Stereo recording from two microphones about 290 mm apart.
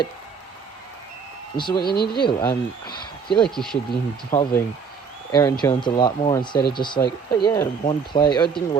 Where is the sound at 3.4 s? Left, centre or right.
Centre.